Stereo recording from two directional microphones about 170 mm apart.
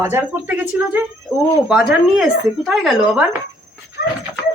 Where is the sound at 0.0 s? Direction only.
15° right (ahead or behind).